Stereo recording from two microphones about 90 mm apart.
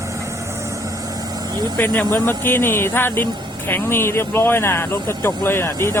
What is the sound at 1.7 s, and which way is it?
Speech, 20° left (ahead or behind).